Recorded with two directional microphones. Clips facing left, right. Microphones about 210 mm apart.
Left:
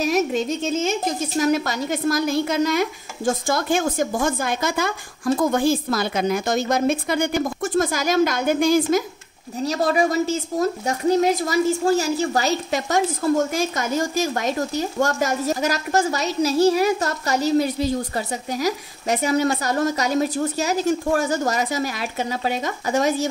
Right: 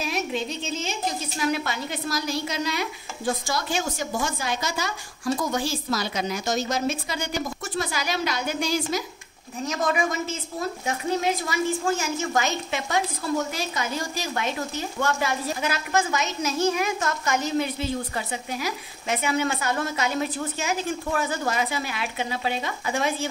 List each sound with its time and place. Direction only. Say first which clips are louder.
0.0 s a woman's voice: left 7 dB; 45° left (ahead or behind)
9.6 s speech: left 5 dB; 35° left (ahead or behind)